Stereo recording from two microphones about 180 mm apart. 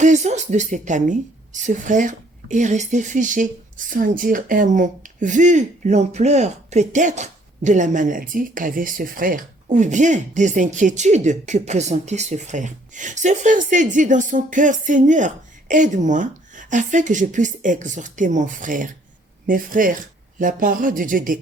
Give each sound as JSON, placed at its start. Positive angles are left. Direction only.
{"t": 0.0, "sound": "a woman's voice", "side_deg": -40}